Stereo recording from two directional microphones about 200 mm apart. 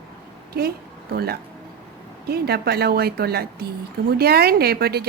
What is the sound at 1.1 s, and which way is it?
A woman's voice, 50° right (ahead or behind).